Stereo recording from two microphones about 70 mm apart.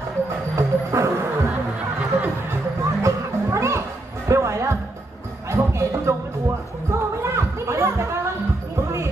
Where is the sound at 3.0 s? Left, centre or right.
Right.